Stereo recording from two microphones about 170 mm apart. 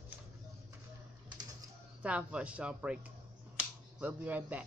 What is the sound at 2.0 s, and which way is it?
Speech, 5° right (ahead or behind).